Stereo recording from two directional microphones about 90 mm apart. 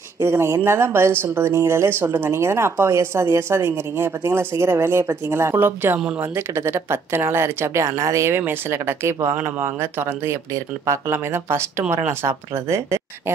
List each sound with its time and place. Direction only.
0.2 s speech: 30° right (ahead or behind)